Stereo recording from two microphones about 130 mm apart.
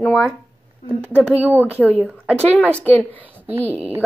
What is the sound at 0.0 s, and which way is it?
Speech, 5° left (ahead or behind).